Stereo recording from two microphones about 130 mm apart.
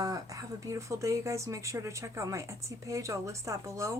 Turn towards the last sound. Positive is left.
turn(degrees=-20)  # may be behind; listen again after turning